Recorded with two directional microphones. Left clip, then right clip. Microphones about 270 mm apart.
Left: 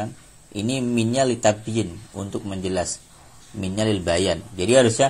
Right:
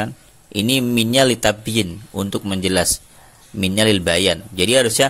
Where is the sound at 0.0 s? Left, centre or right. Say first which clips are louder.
Right 5 dB; right.